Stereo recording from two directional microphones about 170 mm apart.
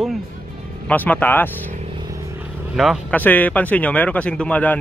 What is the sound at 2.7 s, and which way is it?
Speech, centre (ahead or behind).